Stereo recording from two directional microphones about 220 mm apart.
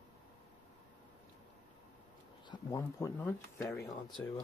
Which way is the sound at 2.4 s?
15° left (ahead or behind).